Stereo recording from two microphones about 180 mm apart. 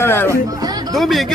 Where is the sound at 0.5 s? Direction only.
20° right (ahead or behind).